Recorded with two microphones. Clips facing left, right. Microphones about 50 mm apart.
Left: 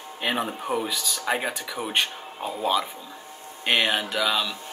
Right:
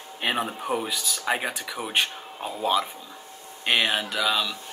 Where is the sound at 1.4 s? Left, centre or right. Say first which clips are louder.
Left 1 dB; centre.